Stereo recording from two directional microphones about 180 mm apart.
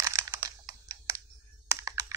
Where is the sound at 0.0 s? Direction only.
15° right (ahead or behind).